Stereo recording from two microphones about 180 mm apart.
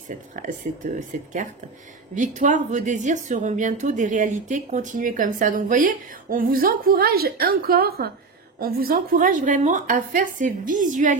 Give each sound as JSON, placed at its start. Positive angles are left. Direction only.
{"t": 0.1, "sound": "speech", "side_deg": -45}